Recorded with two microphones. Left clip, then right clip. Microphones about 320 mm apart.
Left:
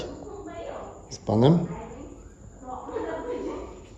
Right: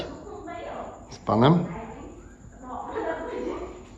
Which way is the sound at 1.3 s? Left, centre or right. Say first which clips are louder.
Right 1 dB; centre.